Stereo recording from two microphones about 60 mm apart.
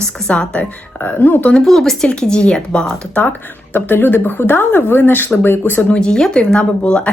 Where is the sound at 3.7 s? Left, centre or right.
Left.